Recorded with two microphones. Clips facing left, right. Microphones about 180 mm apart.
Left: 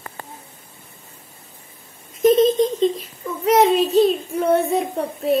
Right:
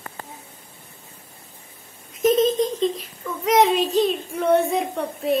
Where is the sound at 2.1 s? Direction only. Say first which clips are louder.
Left 4 dB; centre (ahead or behind).